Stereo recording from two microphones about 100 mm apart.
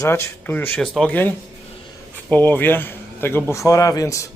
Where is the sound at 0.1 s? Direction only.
20° left (ahead or behind).